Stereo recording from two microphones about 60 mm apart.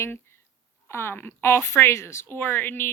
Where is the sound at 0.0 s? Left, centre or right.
Left.